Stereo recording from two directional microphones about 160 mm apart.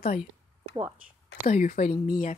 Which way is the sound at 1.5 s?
55° left (ahead or behind).